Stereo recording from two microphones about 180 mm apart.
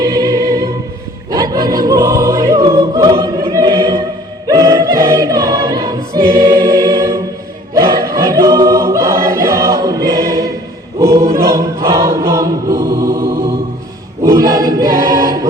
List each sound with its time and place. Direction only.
0.0 s music: 20° right (ahead or behind)
4.4 s choir: 20° right (ahead or behind)